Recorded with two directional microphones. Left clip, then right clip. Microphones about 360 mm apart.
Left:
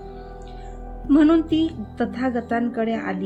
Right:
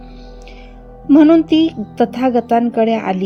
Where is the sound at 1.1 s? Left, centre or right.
Centre.